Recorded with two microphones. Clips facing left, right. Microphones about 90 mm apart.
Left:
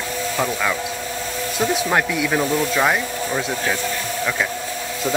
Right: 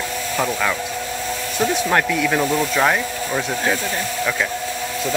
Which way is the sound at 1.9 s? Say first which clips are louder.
Right 1 dB; 10° left (ahead or behind).